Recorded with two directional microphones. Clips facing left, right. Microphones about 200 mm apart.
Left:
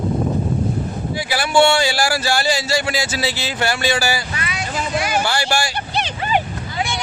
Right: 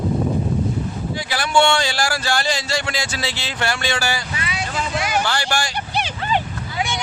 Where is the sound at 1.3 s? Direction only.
5° left (ahead or behind).